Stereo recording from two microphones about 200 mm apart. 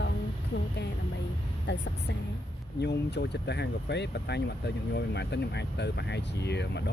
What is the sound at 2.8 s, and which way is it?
Speech, 55° left (ahead or behind).